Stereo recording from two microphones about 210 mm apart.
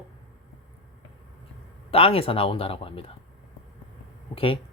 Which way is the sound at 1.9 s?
25° left (ahead or behind).